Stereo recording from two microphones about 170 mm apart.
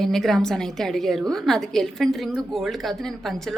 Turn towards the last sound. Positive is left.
turn(degrees=0)  # may be behind; listen again after turning